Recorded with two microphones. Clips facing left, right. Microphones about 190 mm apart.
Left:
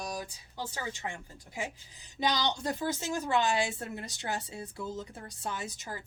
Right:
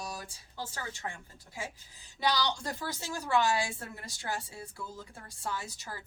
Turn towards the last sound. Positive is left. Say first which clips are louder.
# left 1 dB
turn(degrees=15)  # may be behind; listen again after turning